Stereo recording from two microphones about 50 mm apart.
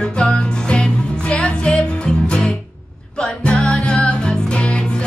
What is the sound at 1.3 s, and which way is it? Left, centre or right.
Music, centre.